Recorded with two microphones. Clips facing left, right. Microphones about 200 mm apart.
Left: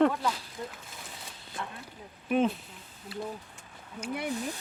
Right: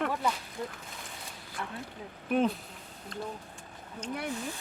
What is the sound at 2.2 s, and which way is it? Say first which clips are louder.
Speech: left 1 dB; centre (ahead or behind).